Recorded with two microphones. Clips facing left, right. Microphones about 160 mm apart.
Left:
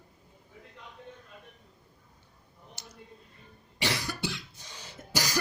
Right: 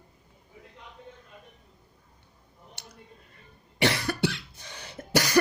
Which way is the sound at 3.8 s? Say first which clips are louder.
Right 7 dB; 60° right (ahead or behind).